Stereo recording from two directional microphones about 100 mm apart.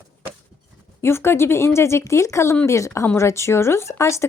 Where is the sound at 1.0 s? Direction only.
25° left (ahead or behind).